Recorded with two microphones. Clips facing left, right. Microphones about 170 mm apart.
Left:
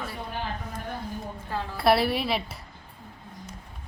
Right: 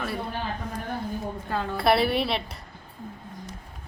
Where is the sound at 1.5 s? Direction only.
70° right (ahead or behind).